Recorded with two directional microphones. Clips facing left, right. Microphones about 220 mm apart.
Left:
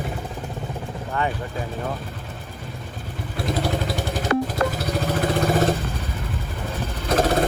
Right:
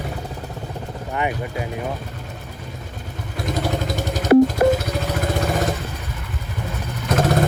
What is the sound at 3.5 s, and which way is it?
Vehicle, 45° right (ahead or behind).